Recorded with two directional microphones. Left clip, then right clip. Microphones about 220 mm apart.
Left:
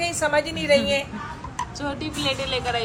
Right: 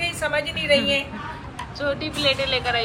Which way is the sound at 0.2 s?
45° left (ahead or behind).